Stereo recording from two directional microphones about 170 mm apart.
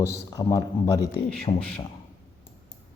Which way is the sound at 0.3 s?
20° left (ahead or behind).